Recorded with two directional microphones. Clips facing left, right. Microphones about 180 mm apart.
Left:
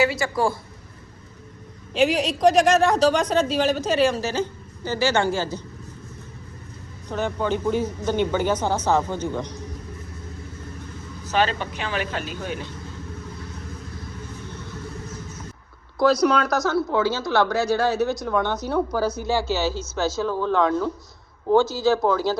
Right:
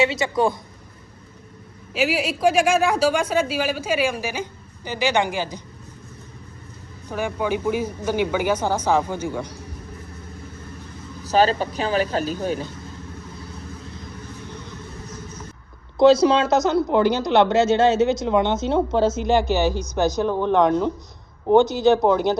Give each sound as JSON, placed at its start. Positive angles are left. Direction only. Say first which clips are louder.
{"t": 0.0, "sound": "speech", "louder": "right 1 dB", "side_deg": -20}
{"t": 1.9, "sound": "a woman's voice", "louder": "left 2 dB", "side_deg": -5}
{"t": 7.1, "sound": "a woman's voice", "louder": "even", "side_deg": -10}
{"t": 11.3, "sound": "speech", "louder": "right 4 dB", "side_deg": -35}
{"t": 16.0, "sound": "speech", "louder": "right 4 dB", "side_deg": -25}